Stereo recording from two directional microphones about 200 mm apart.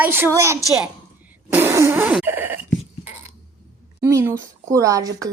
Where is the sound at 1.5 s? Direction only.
10° right (ahead or behind).